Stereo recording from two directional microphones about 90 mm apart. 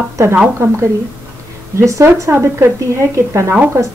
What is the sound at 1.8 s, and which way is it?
A woman's voice, 35° right (ahead or behind).